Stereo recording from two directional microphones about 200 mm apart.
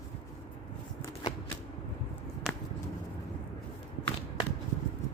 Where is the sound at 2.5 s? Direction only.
Centre (ahead or behind).